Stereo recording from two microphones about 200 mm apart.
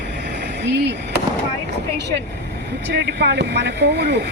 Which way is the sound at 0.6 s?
60° right (ahead or behind).